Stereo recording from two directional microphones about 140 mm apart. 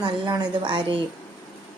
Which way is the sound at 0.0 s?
30° right (ahead or behind).